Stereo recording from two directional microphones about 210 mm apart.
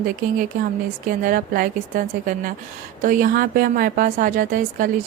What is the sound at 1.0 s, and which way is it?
A woman's voice, 40° right (ahead or behind).